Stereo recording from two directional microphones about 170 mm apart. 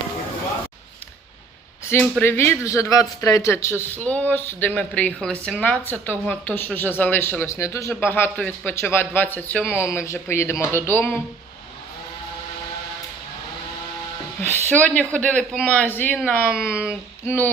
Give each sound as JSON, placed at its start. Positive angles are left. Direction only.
{"t": 1.8, "sound": "a man's voice", "side_deg": 15}
{"t": 14.4, "sound": "a man's voice", "side_deg": 10}
{"t": 16.6, "sound": "speech", "side_deg": -5}
{"t": 17.2, "sound": "a man's voice", "side_deg": 10}